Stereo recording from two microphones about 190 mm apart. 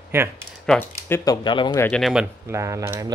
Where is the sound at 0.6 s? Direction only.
5° left (ahead or behind).